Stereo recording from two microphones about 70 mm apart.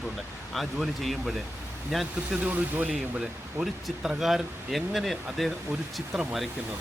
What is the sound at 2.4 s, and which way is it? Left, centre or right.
Speech, right.